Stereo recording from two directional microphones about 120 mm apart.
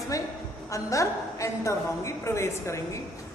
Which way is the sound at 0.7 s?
25° left (ahead or behind).